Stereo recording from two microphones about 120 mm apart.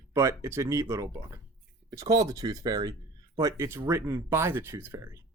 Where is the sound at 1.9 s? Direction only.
30° right (ahead or behind).